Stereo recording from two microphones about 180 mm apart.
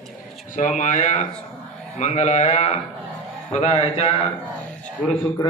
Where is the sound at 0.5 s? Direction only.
45° left (ahead or behind).